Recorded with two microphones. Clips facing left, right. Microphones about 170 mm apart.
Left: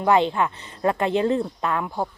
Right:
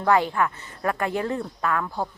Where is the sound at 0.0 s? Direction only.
20° left (ahead or behind).